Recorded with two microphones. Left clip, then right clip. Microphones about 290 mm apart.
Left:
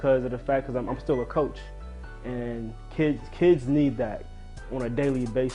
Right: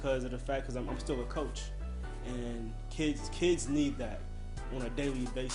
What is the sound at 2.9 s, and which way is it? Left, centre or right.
Speech, left.